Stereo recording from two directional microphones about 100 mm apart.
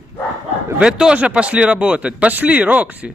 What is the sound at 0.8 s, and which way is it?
Speech, 10° right (ahead or behind).